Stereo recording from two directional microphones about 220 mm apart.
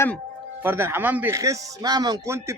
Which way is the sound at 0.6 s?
10° right (ahead or behind).